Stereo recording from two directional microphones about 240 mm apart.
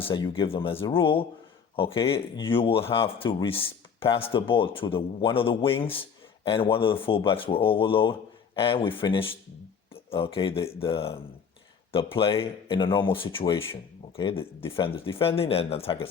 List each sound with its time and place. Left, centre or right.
0.0 s speech: centre